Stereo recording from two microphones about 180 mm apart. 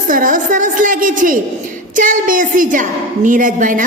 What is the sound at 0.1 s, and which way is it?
A woman's voice, 50° right (ahead or behind).